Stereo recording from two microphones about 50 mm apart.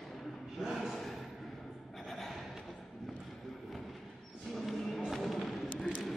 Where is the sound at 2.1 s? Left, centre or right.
Centre.